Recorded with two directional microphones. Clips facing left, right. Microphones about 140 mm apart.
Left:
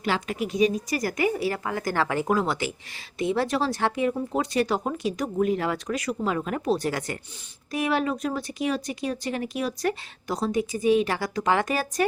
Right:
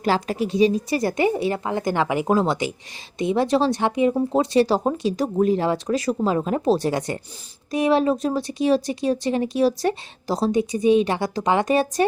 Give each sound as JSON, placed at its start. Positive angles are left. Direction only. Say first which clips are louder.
{"t": 0.0, "sound": "speech", "louder": "right 5 dB", "side_deg": -35}